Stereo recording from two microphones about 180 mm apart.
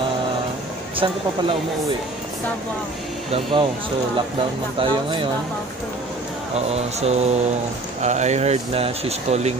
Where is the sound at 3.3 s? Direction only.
30° right (ahead or behind).